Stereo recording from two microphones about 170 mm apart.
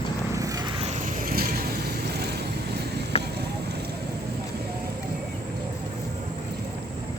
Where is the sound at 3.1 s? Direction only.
35° left (ahead or behind).